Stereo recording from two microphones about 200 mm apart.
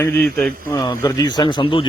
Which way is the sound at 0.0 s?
5° left (ahead or behind).